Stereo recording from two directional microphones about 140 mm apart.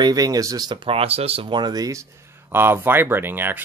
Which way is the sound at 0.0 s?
25° right (ahead or behind).